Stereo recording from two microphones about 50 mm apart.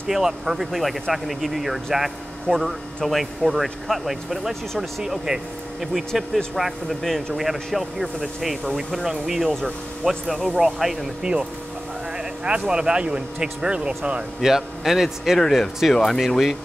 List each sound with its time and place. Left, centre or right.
0.1 s speech: centre
2.4 s speech: centre
12.4 s speech: centre
14.4 s speech: centre
15.9 s speech: centre